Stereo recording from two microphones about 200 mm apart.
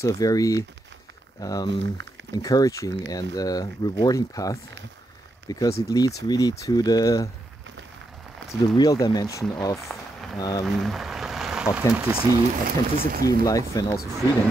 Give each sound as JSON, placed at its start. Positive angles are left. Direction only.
{"t": 0.0, "sound": "speech", "side_deg": 15}
{"t": 1.7, "sound": "speech", "side_deg": -65}
{"t": 2.3, "sound": "speech", "side_deg": 20}
{"t": 8.5, "sound": "speech", "side_deg": 15}
{"t": 9.8, "sound": "a sound", "side_deg": 0}
{"t": 12.0, "sound": "speech", "side_deg": -15}
{"t": 12.6, "sound": "speech", "side_deg": -50}
{"t": 13.4, "sound": "speech", "side_deg": 15}